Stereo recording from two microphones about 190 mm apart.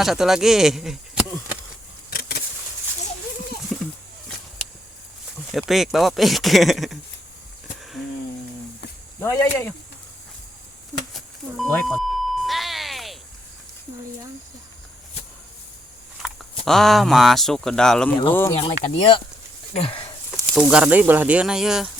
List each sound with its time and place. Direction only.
0.0 s speech: centre (ahead or behind)
2.0 s a sound: 55° left (ahead or behind)
3.7 s a sound: centre (ahead or behind)
5.5 s speech: centre (ahead or behind)
9.2 s speech: 15° left (ahead or behind)
11.1 s doorbell: centre (ahead or behind)
16.6 s speech: centre (ahead or behind)
18.5 s speech: 30° left (ahead or behind)
20.6 s speech: 5° right (ahead or behind)